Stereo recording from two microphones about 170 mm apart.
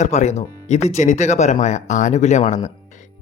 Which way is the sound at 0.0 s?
45° left (ahead or behind).